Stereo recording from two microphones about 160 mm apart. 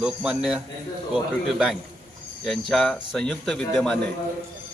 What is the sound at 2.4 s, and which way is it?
Speech, centre (ahead or behind).